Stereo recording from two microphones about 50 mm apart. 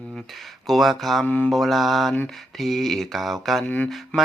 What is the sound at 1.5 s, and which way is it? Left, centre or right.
Speech, centre.